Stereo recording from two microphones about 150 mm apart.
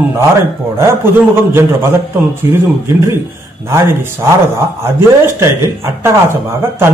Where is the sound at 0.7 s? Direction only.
15° right (ahead or behind).